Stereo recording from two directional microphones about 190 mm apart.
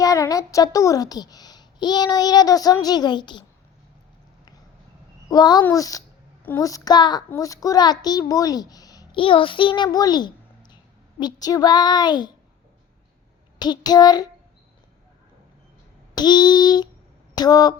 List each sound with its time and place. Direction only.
0.0 s a child's voice: 20° left (ahead or behind)
5.3 s a child's voice: 20° left (ahead or behind)
13.6 s a child's voice: 20° left (ahead or behind)
16.1 s a child's voice: 20° left (ahead or behind)